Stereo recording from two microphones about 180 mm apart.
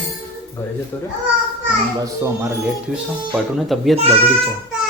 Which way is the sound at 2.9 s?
5° right (ahead or behind).